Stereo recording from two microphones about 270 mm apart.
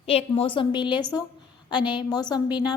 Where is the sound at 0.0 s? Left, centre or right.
Left.